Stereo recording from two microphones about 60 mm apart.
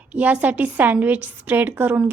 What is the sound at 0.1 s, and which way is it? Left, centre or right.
A woman's voice, right.